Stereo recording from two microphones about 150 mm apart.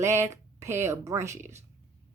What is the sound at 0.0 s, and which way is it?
Speech, 20° right (ahead or behind).